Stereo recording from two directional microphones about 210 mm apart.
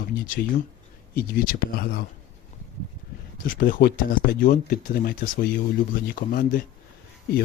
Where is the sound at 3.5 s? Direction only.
40° left (ahead or behind).